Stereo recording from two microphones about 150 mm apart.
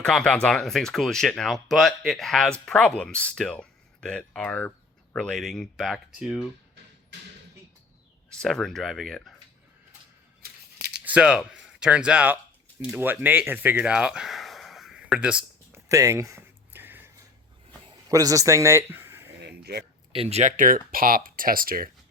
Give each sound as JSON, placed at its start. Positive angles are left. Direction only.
{"t": 0.0, "sound": "speech", "side_deg": 5}
{"t": 8.3, "sound": "speech", "side_deg": 5}
{"t": 10.4, "sound": "scissors", "side_deg": -90}
{"t": 11.0, "sound": "speech", "side_deg": -5}
{"t": 15.7, "sound": "a sound", "side_deg": -20}
{"t": 18.1, "sound": "speech", "side_deg": -25}
{"t": 19.5, "sound": "a sound", "side_deg": -90}
{"t": 20.1, "sound": "speech", "side_deg": -45}